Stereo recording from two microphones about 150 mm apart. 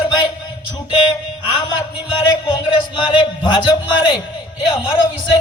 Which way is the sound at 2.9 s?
35° left (ahead or behind).